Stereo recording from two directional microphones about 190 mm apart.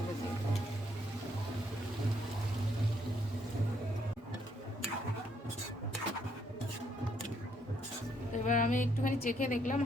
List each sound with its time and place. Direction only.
8.3 s a woman's voice: 40° left (ahead or behind)